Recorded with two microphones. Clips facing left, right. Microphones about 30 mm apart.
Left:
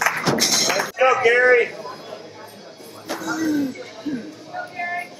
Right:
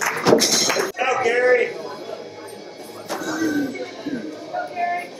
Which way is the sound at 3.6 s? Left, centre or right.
Centre.